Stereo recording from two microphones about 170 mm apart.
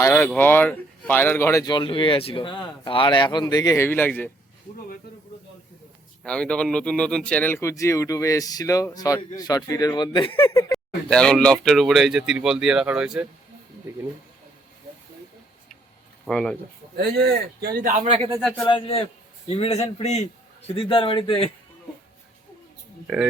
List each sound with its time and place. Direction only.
0.0 s a sound: 10° left (ahead or behind)
0.3 s speech: 10° left (ahead or behind)
6.2 s speech: 5° left (ahead or behind); by 10.5 s 30° left (ahead or behind)
10.7 s speech: 5° left (ahead or behind)
16.2 s speech: 5° left (ahead or behind)
17.0 s speech: 65° right (ahead or behind)
18.1 s speech: 30° right (ahead or behind)
18.6 s a man's voice: 30° left (ahead or behind)
23.0 s speech: 5° right (ahead or behind)